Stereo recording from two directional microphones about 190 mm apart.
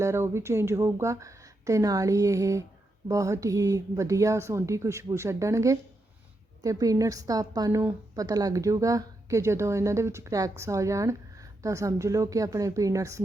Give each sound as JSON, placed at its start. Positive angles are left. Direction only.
{"t": 0.0, "sound": "a woman's voice", "side_deg": -15}